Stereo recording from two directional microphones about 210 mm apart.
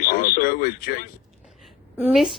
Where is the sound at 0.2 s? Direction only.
45° left (ahead or behind).